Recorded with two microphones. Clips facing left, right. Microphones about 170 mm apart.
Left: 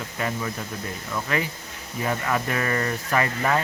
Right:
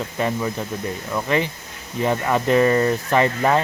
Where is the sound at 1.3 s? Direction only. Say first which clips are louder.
Right 6 dB; 20° right (ahead or behind).